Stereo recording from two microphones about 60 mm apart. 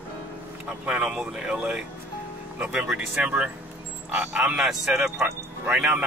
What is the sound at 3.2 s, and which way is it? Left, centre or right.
A man's voice, right.